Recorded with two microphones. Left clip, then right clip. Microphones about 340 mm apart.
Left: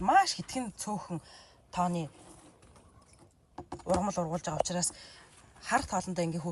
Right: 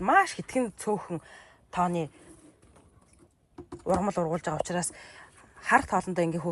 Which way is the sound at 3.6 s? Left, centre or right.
Centre.